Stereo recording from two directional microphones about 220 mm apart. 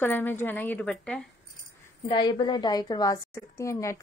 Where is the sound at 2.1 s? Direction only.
20° left (ahead or behind).